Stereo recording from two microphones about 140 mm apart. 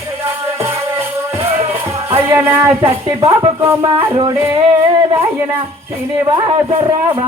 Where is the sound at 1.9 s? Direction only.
45° right (ahead or behind).